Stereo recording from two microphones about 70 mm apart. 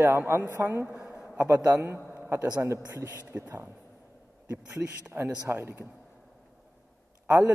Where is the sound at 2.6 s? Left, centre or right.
Right.